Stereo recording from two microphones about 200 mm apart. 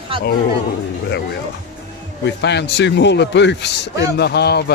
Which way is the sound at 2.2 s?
60° left (ahead or behind).